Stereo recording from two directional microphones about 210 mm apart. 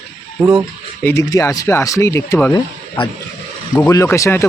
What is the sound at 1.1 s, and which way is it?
Speech, 15° left (ahead or behind).